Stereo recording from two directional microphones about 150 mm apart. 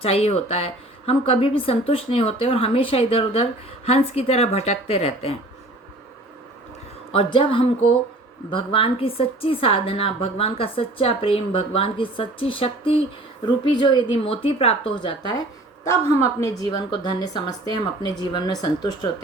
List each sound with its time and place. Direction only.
0.0 s a woman's voice: 40° left (ahead or behind)
7.1 s a woman's voice: 40° left (ahead or behind)
15.8 s a woman's voice: 20° left (ahead or behind)